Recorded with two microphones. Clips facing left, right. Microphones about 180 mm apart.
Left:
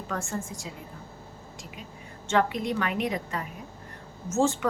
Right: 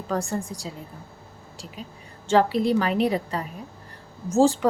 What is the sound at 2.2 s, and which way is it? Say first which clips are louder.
A woman's voice: right 6 dB; 35° right (ahead or behind).